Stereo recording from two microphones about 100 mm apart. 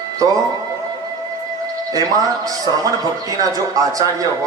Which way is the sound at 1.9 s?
35° right (ahead or behind).